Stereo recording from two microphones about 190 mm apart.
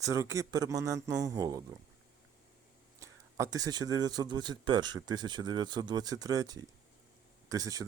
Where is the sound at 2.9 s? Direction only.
15° right (ahead or behind).